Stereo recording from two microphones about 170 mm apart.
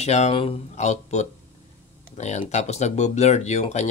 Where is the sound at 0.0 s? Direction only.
40° left (ahead or behind).